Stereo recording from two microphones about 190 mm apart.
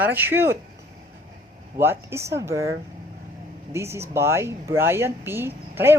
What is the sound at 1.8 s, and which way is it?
Speech, 15° right (ahead or behind).